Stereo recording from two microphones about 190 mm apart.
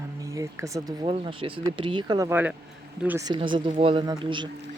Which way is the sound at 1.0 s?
30° right (ahead or behind).